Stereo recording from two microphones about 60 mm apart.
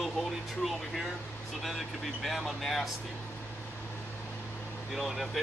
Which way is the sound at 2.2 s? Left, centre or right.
Centre.